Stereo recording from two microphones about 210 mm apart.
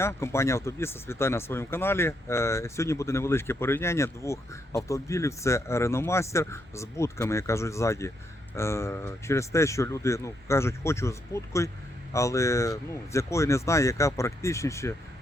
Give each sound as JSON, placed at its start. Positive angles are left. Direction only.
{"t": 0.0, "sound": "speech", "side_deg": 10}